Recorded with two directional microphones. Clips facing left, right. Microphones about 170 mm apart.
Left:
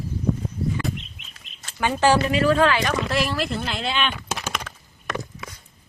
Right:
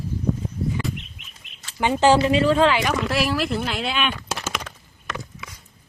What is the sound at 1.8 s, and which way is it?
Speech, 20° right (ahead or behind).